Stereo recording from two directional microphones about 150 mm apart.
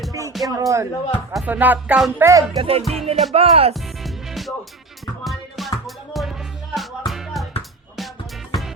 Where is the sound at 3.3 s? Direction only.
40° right (ahead or behind).